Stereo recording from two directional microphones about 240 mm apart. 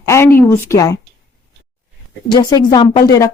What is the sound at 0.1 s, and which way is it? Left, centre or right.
Speech, centre.